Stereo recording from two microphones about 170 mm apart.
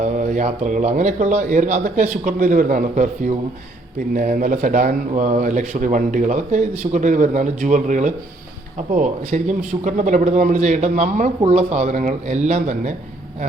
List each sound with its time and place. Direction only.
0.0 s a man's voice: 45° right (ahead or behind)